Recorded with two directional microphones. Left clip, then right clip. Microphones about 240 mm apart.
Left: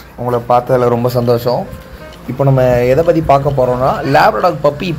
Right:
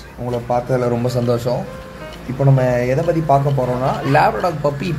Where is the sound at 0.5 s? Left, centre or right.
Centre.